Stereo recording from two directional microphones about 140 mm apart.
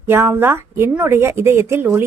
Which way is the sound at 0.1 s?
15° right (ahead or behind).